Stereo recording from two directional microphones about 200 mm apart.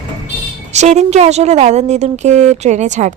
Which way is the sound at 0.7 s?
35° right (ahead or behind).